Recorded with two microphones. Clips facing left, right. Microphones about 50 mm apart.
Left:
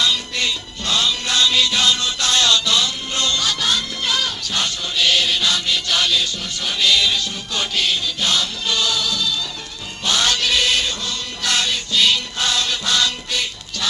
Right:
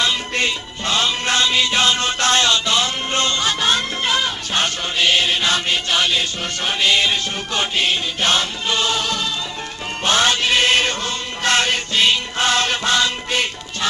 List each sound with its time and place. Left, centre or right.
0.0 s music: right